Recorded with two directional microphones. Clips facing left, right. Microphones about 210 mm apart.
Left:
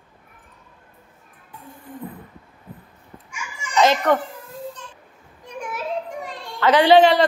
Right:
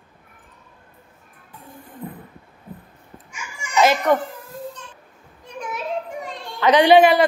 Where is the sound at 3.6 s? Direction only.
10° right (ahead or behind).